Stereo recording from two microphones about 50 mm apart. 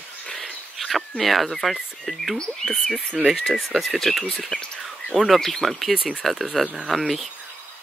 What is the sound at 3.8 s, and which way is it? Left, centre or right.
Speech, centre.